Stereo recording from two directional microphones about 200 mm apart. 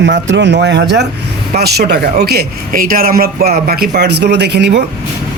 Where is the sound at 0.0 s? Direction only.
65° right (ahead or behind).